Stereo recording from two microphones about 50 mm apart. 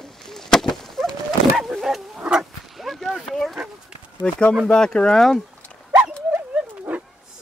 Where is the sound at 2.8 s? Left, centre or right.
Centre.